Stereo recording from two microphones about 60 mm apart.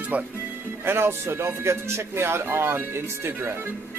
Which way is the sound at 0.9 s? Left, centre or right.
Right.